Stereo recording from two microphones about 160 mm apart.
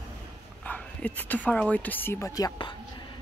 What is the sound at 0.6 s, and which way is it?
Speech, 10° left (ahead or behind).